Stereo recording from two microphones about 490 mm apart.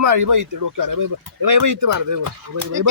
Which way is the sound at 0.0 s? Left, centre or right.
Right.